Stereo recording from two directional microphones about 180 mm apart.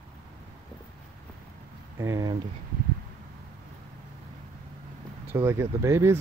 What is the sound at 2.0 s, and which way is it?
Speech, 20° right (ahead or behind).